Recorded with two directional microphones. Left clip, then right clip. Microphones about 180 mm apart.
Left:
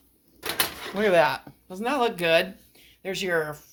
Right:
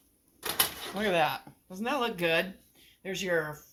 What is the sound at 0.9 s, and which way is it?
Speech, 50° left (ahead or behind).